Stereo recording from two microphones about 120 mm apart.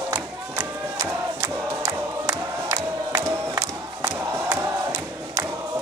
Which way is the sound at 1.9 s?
25° right (ahead or behind).